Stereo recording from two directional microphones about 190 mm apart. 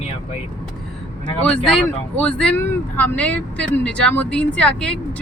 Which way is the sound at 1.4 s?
5° left (ahead or behind).